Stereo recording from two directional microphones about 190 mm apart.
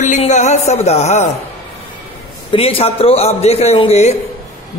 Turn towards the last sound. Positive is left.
turn(degrees=35)  # may be behind; listen again after turning